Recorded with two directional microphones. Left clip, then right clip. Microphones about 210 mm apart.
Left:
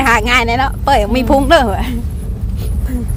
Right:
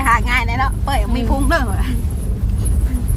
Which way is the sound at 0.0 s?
55° left (ahead or behind).